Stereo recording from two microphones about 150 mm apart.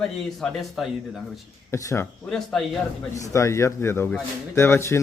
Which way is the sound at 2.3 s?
5° left (ahead or behind).